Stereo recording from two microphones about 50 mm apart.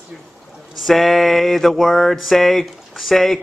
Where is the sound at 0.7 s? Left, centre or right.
Centre.